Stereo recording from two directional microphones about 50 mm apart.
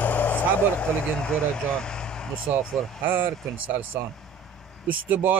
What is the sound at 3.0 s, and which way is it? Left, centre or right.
Speech, right.